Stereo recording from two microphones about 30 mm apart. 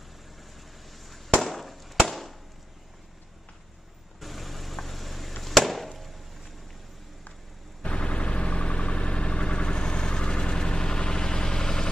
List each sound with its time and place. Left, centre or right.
0.9 s fireworks: centre
2.0 s chop: centre
4.2 s vehicle: centre
5.4 s chop: centre
7.8 s vehicle: left
11.0 s a sound: left